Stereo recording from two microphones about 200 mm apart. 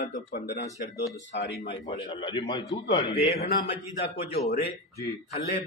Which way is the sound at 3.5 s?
50° left (ahead or behind).